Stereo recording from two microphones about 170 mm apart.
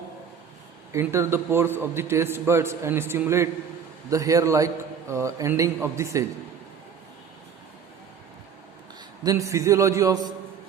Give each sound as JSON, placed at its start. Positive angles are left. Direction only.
{"t": 0.9, "sound": "a man's voice", "side_deg": -15}
{"t": 9.2, "sound": "a man's voice", "side_deg": -20}